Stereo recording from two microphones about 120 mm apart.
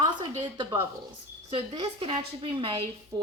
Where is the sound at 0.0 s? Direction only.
35° right (ahead or behind).